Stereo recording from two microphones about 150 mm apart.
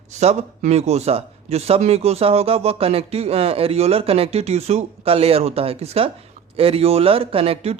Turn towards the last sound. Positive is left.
turn(degrees=-40)  # may be behind; listen again after turning